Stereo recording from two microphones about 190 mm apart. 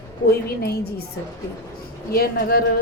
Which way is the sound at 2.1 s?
50° left (ahead or behind).